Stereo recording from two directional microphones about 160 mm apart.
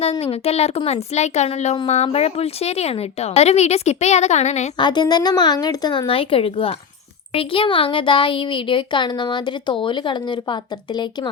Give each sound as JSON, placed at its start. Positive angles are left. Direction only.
{"t": 0.0, "sound": "speech", "side_deg": 40}
{"t": 4.8, "sound": "a woman's voice", "side_deg": 25}